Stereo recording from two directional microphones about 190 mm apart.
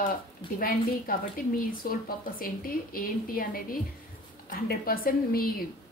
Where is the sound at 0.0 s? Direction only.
50° left (ahead or behind).